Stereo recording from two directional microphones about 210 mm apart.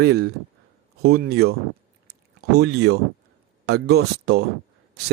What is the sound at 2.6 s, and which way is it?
Speech, 50° right (ahead or behind).